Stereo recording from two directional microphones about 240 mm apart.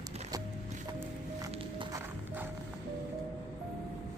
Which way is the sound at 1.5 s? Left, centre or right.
Right.